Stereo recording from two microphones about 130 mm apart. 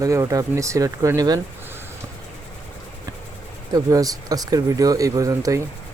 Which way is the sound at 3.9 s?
30° right (ahead or behind).